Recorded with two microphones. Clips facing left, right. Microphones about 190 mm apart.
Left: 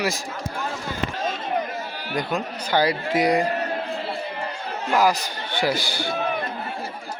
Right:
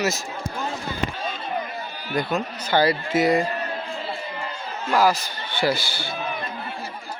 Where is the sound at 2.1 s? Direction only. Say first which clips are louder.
Right 1 dB; 15° left (ahead or behind).